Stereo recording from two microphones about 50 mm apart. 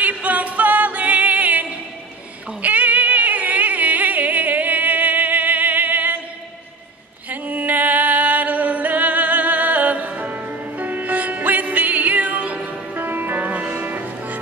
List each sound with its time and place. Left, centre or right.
0.0 s music: right
7.2 s music: right